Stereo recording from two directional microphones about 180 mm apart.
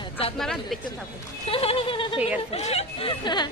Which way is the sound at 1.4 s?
30° left (ahead or behind).